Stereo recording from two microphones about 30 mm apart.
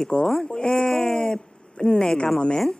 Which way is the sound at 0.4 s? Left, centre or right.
Left.